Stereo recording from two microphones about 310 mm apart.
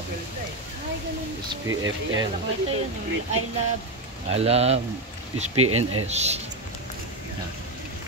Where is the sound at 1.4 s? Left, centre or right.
Centre.